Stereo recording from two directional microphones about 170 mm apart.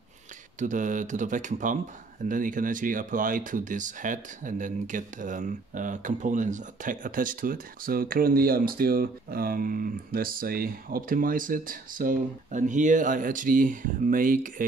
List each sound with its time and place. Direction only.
0.6 s speech: 50° right (ahead or behind)